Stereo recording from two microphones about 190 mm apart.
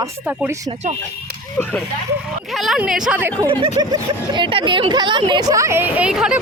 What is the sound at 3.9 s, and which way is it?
Speech, 25° right (ahead or behind).